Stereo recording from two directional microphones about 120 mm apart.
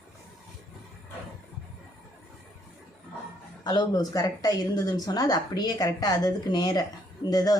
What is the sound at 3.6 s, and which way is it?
Speech, 35° left (ahead or behind).